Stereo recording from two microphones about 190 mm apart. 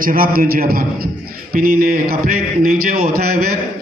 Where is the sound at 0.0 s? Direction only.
50° right (ahead or behind).